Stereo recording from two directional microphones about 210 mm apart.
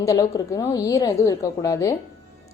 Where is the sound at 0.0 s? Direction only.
15° left (ahead or behind).